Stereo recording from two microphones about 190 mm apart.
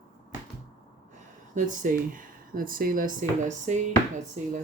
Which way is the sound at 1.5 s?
40° right (ahead or behind).